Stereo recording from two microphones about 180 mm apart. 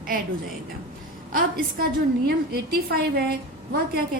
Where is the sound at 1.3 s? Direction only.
55° right (ahead or behind).